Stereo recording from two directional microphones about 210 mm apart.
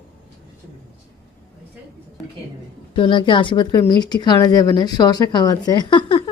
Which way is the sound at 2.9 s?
25° left (ahead or behind).